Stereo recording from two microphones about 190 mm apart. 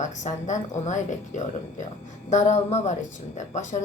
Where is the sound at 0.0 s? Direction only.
40° left (ahead or behind).